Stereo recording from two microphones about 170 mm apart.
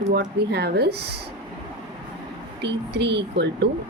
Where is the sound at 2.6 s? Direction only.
90° right.